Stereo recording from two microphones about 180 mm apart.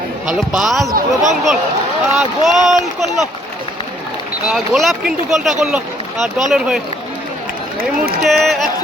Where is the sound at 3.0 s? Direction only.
Centre (ahead or behind).